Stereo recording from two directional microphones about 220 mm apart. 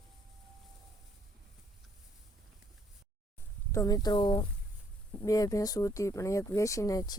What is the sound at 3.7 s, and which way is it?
Speech, 15° left (ahead or behind).